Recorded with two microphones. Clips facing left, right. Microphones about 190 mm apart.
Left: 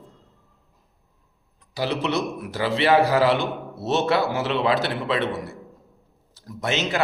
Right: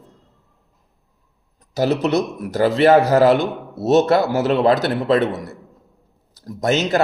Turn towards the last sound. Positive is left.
turn(degrees=-40)  # may be behind; listen again after turning